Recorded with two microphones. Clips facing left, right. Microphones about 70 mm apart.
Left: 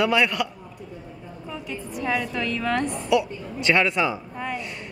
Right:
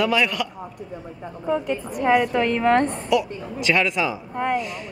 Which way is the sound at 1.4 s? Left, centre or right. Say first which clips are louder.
Right 11 dB; right.